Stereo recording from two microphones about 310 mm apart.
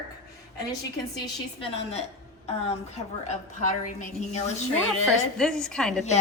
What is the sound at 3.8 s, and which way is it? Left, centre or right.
Speech, left.